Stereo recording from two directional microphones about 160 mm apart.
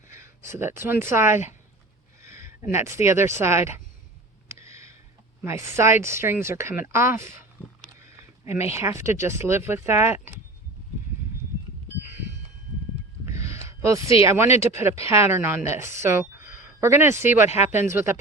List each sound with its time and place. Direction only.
0.1 s speech: 15° right (ahead or behind)
4.4 s a sound: 15° right (ahead or behind)
5.4 s speech: 15° right (ahead or behind)
8.7 s speech: 15° right (ahead or behind)
13.2 s a sound: 20° right (ahead or behind)
14.3 s speech: 15° right (ahead or behind)
17.3 s speech: 45° left (ahead or behind)
17.7 s speech: 15° right (ahead or behind)